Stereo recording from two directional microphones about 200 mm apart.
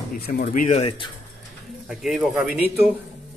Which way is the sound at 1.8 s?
Centre (ahead or behind).